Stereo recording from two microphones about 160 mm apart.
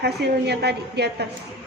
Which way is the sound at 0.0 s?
90° right.